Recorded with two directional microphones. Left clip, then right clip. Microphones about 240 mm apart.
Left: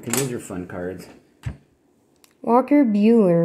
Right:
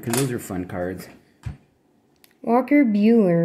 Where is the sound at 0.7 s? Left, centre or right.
Right.